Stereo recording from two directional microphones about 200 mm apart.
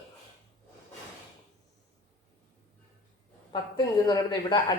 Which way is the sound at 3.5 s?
20° left (ahead or behind).